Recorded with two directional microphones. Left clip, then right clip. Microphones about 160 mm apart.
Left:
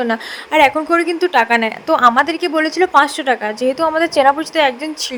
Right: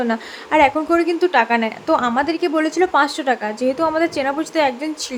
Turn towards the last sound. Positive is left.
turn(degrees=25)  # may be behind; listen again after turning